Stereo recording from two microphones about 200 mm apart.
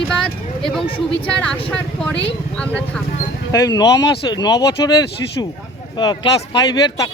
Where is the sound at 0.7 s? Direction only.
5° left (ahead or behind).